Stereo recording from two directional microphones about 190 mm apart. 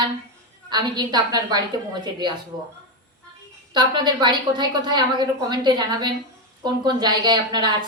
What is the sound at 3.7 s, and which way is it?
A woman's voice, 25° right (ahead or behind).